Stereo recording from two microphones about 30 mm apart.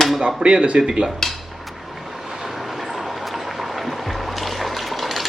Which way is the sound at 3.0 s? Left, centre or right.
Centre.